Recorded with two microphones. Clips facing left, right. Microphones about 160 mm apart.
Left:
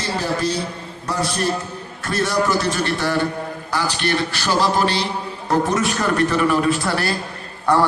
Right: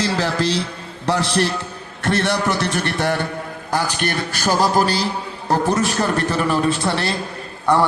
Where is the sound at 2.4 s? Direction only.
20° right (ahead or behind).